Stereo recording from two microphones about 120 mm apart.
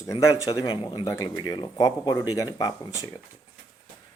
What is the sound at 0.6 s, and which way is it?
Speech, 40° left (ahead or behind).